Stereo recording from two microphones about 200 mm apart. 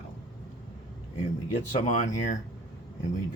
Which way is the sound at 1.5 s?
40° left (ahead or behind).